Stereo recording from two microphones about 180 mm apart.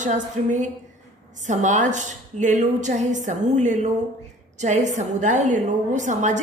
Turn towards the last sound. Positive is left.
turn(degrees=-40)  # may be behind; listen again after turning